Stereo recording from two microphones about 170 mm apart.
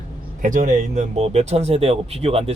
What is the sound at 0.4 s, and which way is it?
Speech, 50° right (ahead or behind).